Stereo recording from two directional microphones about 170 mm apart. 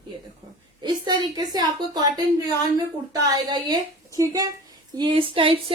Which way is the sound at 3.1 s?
20° right (ahead or behind).